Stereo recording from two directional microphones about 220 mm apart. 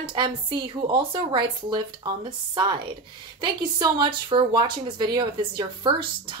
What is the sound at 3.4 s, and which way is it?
A woman's voice, 20° right (ahead or behind).